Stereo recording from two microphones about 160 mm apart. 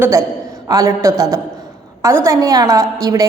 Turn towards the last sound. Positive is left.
turn(degrees=-20)  # may be behind; listen again after turning